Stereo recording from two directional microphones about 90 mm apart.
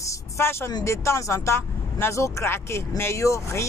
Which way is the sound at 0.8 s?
30° left (ahead or behind).